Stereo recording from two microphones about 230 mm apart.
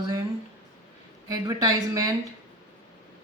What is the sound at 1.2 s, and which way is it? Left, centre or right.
Speech, centre.